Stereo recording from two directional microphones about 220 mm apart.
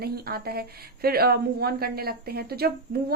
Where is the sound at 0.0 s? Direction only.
45° right (ahead or behind).